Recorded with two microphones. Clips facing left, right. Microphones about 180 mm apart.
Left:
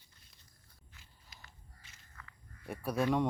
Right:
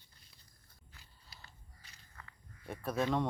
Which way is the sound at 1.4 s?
35° right (ahead or behind).